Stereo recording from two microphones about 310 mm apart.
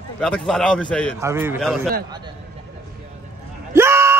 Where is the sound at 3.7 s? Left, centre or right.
Centre.